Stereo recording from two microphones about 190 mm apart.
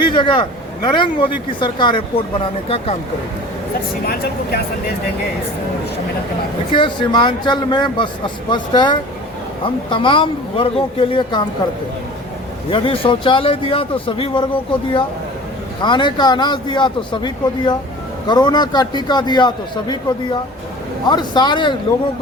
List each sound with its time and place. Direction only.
0.1 s a man's voice: 25° left (ahead or behind)
4.0 s speech: 55° left (ahead or behind)
6.7 s a man's voice: 25° left (ahead or behind)
12.7 s a man's voice: 30° left (ahead or behind)